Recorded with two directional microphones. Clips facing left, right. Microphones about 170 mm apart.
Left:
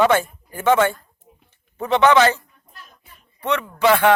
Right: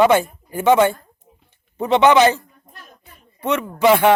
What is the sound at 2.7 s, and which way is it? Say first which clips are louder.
Music: left 1 dB; 45° right (ahead or behind).